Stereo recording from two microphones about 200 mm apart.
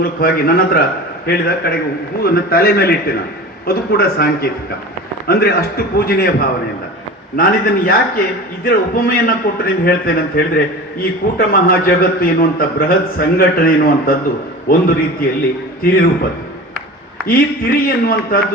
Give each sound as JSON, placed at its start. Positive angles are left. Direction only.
{"t": 0.0, "sound": "a man's voice", "side_deg": 45}
{"t": 7.3, "sound": "a man's voice", "side_deg": 45}
{"t": 17.2, "sound": "a man's voice", "side_deg": 45}